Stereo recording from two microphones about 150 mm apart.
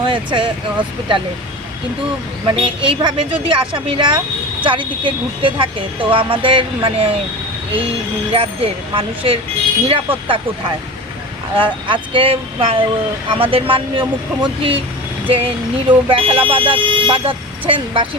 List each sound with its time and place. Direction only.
0.0 s speech: 30° right (ahead or behind)
2.5 s speech: 35° right (ahead or behind)